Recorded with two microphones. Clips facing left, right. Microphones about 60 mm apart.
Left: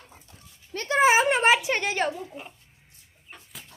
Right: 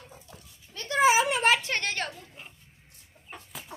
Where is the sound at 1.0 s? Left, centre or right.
Left.